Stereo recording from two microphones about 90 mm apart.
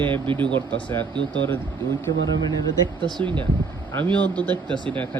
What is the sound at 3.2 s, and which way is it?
Speech, 65° right (ahead or behind).